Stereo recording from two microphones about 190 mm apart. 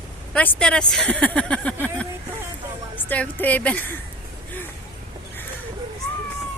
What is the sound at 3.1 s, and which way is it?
Speech, 10° left (ahead or behind).